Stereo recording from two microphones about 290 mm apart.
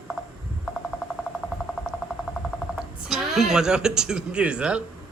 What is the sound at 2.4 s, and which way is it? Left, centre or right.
Speech, centre.